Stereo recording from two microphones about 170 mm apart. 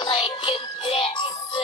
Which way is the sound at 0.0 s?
30° left (ahead or behind).